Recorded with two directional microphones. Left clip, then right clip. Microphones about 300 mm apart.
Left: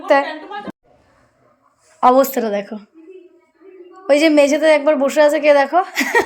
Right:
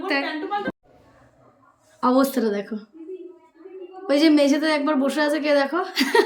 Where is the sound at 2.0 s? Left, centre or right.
Centre.